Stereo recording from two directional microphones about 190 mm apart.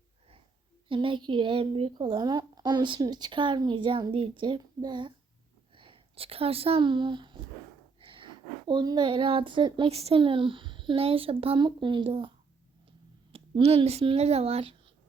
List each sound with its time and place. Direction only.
0.9 s speech: 25° right (ahead or behind)
13.3 s speech: 30° right (ahead or behind)